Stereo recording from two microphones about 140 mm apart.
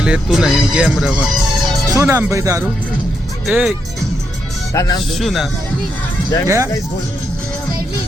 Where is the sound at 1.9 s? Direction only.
20° right (ahead or behind).